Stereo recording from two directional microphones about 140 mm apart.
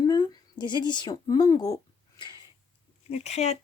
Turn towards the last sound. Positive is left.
turn(degrees=50)  # may be behind; listen again after turning